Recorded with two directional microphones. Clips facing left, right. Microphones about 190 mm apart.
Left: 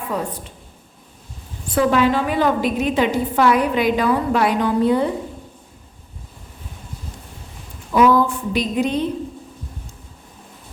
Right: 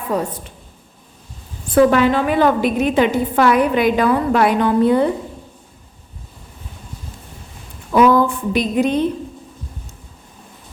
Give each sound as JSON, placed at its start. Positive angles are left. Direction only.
{"t": 0.1, "sound": "a woman's voice", "side_deg": -45}
{"t": 1.7, "sound": "a woman's voice", "side_deg": -55}
{"t": 7.9, "sound": "a sound", "side_deg": -55}